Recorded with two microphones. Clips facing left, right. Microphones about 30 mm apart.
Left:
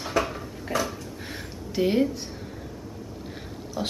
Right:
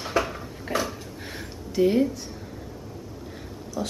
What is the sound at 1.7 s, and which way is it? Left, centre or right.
Speech, left.